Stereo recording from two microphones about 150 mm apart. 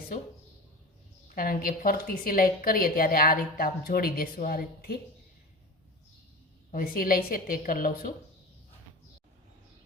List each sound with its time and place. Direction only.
1.4 s a woman's voice: 75° left (ahead or behind)
6.7 s a woman's voice: 75° left (ahead or behind)